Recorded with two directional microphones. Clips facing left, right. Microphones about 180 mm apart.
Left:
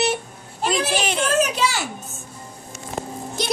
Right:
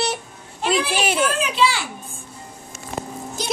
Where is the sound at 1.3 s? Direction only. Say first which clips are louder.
Left 1 dB; 45° left (ahead or behind).